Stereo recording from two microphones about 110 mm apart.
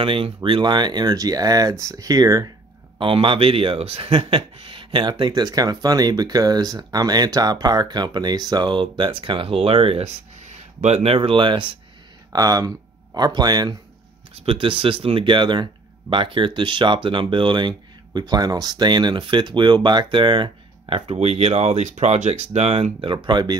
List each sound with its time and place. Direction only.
0.0 s speech: 50° right (ahead or behind); by 2.5 s 30° right (ahead or behind)
3.0 s speech: 50° right (ahead or behind)
5.2 s speech: 40° right (ahead or behind); by 11.1 s 75° right (ahead or behind)
11.1 s speech: 50° right (ahead or behind)
12.3 s speech: 35° right (ahead or behind)
14.3 s speech: 60° right (ahead or behind)
21.1 s speech: 70° right (ahead or behind); by 23.5 s 40° right (ahead or behind)